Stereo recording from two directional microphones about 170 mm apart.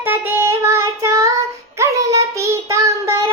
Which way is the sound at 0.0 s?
15° right (ahead or behind).